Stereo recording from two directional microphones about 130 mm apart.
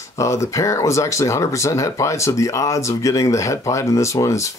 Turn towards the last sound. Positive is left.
turn(degrees=25)  # may be behind; listen again after turning